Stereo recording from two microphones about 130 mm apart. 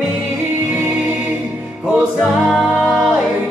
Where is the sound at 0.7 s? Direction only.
5° right (ahead or behind).